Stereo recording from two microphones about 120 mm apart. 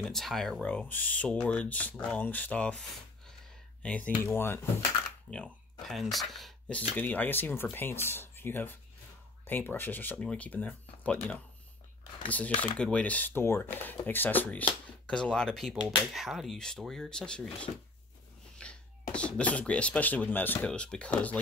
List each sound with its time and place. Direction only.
0.0 s speech: centre (ahead or behind)
3.8 s speech: 10° left (ahead or behind)
5.3 s speech: 5° left (ahead or behind)
7.0 s speech: 15° left (ahead or behind)
12.5 s speech: 10° left (ahead or behind)